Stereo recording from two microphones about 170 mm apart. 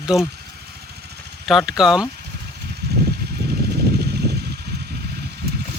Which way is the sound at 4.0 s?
70° right (ahead or behind).